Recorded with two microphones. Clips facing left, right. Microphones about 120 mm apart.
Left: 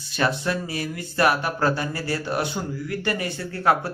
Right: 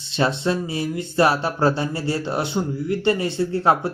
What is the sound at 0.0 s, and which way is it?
Speech, 25° right (ahead or behind).